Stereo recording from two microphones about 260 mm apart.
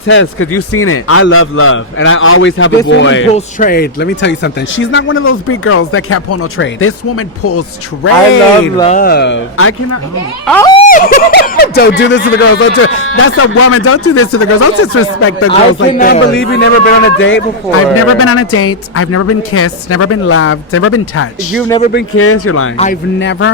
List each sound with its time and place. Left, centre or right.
0.0 s speech: left
3.3 s speech: left
8.8 s speech: left
10.4 s speech: centre
10.8 s speech: left
15.9 s speech: left
16.2 s speech: left
18.2 s a woman's voice: left
23.2 s speech: left